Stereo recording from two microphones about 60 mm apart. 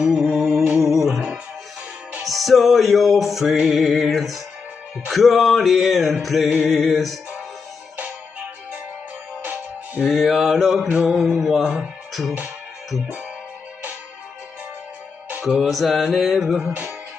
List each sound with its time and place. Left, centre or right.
0.0 s music: centre
2.2 s music: centre
9.4 s music: right
10.0 s music: centre
11.6 s speech: centre
12.1 s speech: centre
15.4 s music: centre
16.6 s music: right